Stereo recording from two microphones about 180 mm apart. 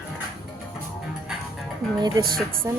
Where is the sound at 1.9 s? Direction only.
25° right (ahead or behind).